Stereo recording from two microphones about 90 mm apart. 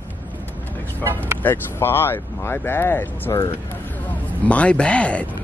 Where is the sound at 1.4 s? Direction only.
25° left (ahead or behind).